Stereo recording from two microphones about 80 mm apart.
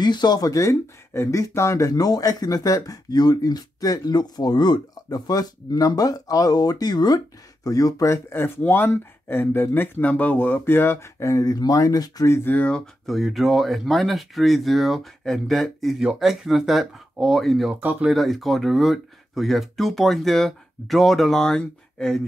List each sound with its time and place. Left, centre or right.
0.0 s speech: left
0.5 s speech: left
7.6 s speech: left
12.3 s speech: left
13.0 s speech: centre